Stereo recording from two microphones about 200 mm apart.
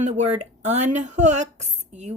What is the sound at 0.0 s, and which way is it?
A woman's voice, 35° right (ahead or behind).